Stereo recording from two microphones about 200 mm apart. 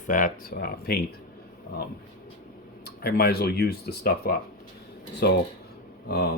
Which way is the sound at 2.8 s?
50° left (ahead or behind).